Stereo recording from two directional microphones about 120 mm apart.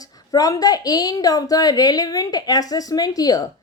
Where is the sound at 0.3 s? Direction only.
30° left (ahead or behind).